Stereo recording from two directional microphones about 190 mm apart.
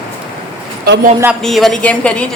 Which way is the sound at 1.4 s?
Centre (ahead or behind).